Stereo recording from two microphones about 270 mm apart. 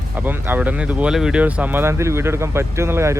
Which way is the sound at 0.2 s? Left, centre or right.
Centre.